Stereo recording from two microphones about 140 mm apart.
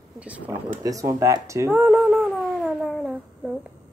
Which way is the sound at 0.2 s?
10° right (ahead or behind).